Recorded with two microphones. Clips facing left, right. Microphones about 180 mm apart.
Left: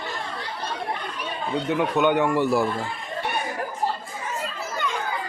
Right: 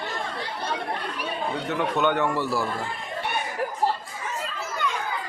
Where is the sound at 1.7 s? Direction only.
10° left (ahead or behind).